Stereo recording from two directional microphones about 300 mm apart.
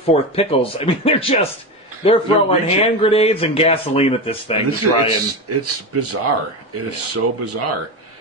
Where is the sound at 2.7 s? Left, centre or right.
Centre.